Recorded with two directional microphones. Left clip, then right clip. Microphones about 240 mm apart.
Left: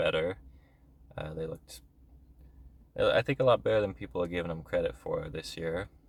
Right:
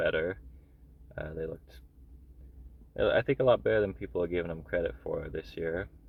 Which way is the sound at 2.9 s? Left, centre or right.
Centre.